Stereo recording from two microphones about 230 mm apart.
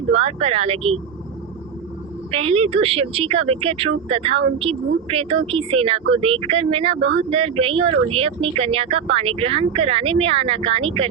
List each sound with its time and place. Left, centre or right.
0.1 s speech: right
2.3 s speech: right